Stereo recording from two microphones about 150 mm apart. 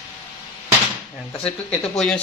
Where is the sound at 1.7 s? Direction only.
5° left (ahead or behind).